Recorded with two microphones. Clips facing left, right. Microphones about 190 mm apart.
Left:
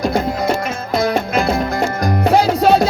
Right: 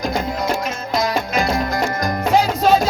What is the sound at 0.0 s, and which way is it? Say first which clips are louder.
Music: left 4 dB; 55° left (ahead or behind).